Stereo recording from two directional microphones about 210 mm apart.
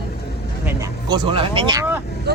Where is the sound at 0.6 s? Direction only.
15° right (ahead or behind).